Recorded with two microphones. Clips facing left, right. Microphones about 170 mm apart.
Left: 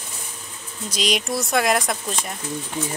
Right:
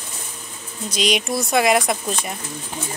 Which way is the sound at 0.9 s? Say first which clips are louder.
Right 2 dB; centre (ahead or behind).